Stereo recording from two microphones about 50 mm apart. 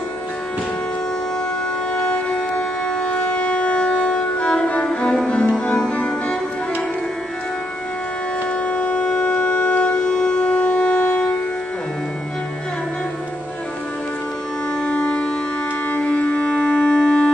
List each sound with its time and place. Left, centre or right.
2.0 s shofar: centre
3.2 s music: left
5.3 s music: left
8.5 s shofar: left
14.8 s civil defense siren: centre
15.9 s music: left